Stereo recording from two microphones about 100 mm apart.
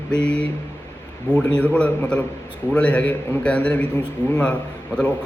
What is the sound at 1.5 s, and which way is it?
A man's voice, 10° left (ahead or behind).